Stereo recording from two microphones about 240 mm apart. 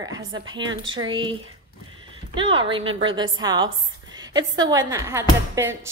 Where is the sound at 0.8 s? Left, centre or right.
Right.